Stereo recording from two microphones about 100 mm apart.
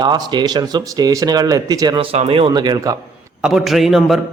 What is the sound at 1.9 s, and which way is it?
Speech, 80° right.